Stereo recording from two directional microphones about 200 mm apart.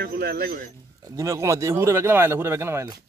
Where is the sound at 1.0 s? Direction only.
15° right (ahead or behind).